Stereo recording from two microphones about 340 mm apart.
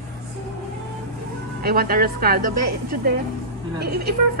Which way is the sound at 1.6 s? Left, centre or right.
Right.